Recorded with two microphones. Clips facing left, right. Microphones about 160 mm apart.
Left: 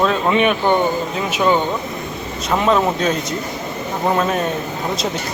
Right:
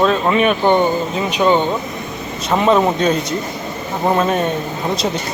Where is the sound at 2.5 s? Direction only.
5° right (ahead or behind).